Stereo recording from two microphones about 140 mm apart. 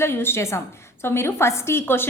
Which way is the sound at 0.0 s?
15° left (ahead or behind).